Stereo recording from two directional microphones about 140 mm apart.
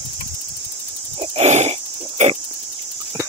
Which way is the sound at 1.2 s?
50° right (ahead or behind).